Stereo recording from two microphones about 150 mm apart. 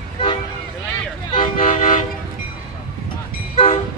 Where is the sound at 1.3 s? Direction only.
40° left (ahead or behind).